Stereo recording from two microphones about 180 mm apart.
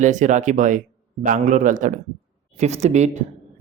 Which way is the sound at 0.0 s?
45° right (ahead or behind).